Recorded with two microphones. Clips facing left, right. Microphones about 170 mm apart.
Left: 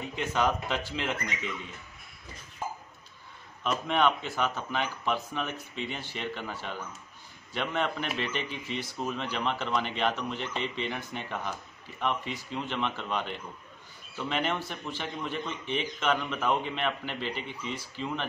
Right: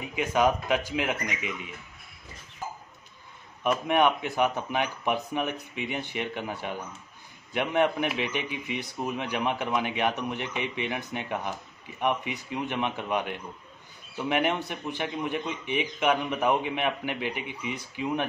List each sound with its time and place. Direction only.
0.0 s speech: 10° right (ahead or behind)
3.6 s speech: 15° right (ahead or behind)
7.5 s speech: 15° right (ahead or behind)